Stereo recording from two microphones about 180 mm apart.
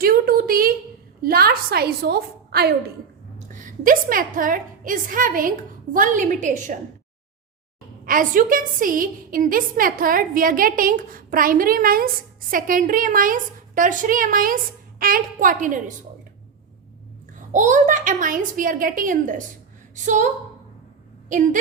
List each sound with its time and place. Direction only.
0.0 s a sound: 55° right (ahead or behind)
1.2 s a woman's voice: 55° right (ahead or behind)
3.5 s a woman's voice: 45° right (ahead or behind)
8.0 s a woman's voice: 50° right (ahead or behind)
17.5 s a woman's voice: 45° right (ahead or behind)
21.2 s speech: 45° right (ahead or behind)